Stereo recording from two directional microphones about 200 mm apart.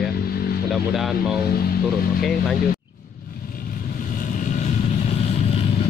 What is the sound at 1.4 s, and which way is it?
Speech, 50° left (ahead or behind).